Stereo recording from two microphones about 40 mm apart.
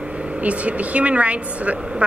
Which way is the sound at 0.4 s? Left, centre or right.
Right.